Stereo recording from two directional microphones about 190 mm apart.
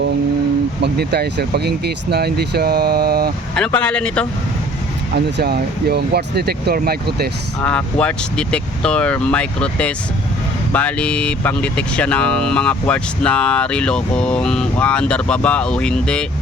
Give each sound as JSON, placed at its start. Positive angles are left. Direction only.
{"t": 0.8, "sound": "speech", "side_deg": -60}
{"t": 3.5, "sound": "speech", "side_deg": 5}
{"t": 5.4, "sound": "speech", "side_deg": -55}
{"t": 7.6, "sound": "speech", "side_deg": 5}